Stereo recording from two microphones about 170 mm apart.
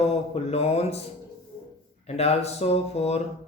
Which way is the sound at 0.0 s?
35° left (ahead or behind).